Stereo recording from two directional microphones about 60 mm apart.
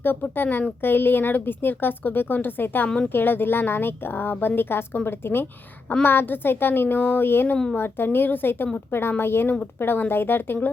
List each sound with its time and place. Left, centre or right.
0.0 s a woman's voice: left